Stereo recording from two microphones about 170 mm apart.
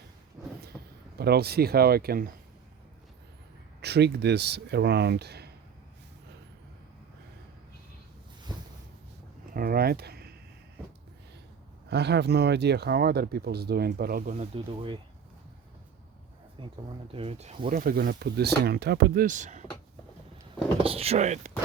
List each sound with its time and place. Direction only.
1.2 s speech: 70° right (ahead or behind)
3.8 s speech: 75° right (ahead or behind)
9.6 s speech: 60° right (ahead or behind)
11.9 s speech: 80° right; by 14.3 s 60° right (ahead or behind)
14.3 s speech: 35° right (ahead or behind)
16.6 s speech: 30° right (ahead or behind)
17.7 s speech: 55° right (ahead or behind)
20.8 s speech: 35° right (ahead or behind)